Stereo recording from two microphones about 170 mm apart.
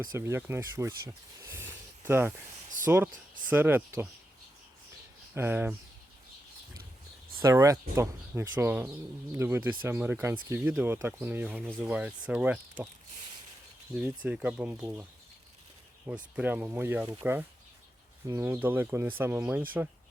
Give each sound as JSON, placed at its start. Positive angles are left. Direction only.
{"t": 0.1, "sound": "speech", "side_deg": -15}
{"t": 5.3, "sound": "speech", "side_deg": -10}
{"t": 7.4, "sound": "speech", "side_deg": -20}
{"t": 13.9, "sound": "speech", "side_deg": -10}
{"t": 16.0, "sound": "speech", "side_deg": -5}
{"t": 18.3, "sound": "speech", "side_deg": -15}